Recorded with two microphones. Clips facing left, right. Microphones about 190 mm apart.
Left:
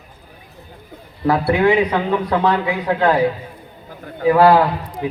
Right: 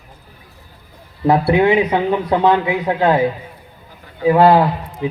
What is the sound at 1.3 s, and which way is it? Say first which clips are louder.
A man's voice: right 2 dB; 20° right (ahead or behind).